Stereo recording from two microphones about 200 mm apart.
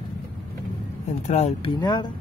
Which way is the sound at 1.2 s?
35° left (ahead or behind).